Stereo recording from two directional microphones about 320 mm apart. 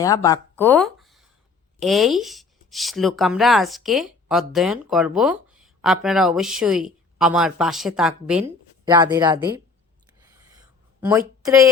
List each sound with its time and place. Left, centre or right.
0.0 s speech: centre
11.0 s a woman's voice: centre